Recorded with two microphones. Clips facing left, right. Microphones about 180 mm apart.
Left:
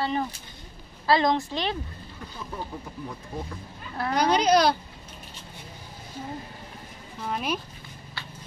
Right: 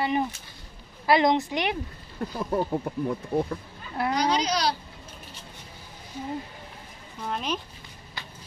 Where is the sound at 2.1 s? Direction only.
50° right (ahead or behind).